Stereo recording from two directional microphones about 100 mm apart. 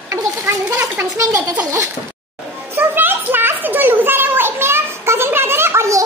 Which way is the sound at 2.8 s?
20° right (ahead or behind).